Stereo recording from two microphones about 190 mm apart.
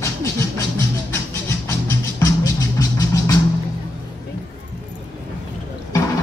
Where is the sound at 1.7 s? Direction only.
15° left (ahead or behind).